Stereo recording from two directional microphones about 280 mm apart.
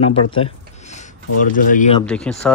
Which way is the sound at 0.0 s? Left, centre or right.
Centre.